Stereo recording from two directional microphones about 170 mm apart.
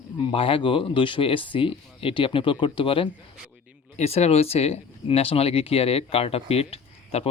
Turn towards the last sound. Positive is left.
turn(degrees=35)  # may be behind; listen again after turning